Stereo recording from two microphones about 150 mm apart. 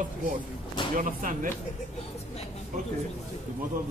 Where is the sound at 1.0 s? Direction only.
60° right (ahead or behind).